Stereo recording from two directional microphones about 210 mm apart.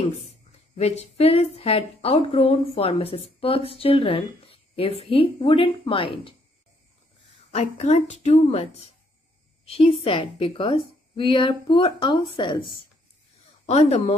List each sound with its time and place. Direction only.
0.1 s a woman's voice: 30° left (ahead or behind)
7.5 s a woman's voice: 30° left (ahead or behind)